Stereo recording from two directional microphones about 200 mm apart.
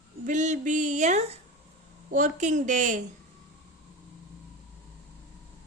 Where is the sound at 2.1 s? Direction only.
40° right (ahead or behind).